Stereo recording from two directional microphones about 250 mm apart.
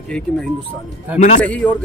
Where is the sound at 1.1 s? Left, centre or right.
Left.